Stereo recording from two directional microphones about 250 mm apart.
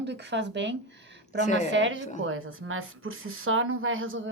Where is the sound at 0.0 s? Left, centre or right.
Right.